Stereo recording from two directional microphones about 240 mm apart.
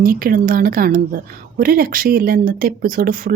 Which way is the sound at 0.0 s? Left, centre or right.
Right.